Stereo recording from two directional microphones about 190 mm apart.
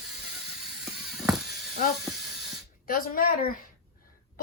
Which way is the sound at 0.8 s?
Centre (ahead or behind).